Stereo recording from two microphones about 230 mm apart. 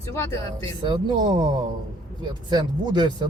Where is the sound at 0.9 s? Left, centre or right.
Centre.